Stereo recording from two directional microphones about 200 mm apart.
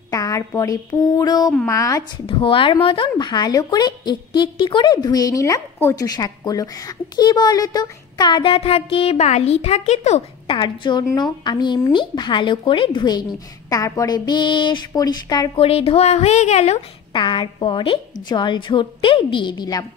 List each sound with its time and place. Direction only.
0.1 s a sound: 15° left (ahead or behind)
1.7 s speech: 15° left (ahead or behind)
15.5 s speech: 30° left (ahead or behind)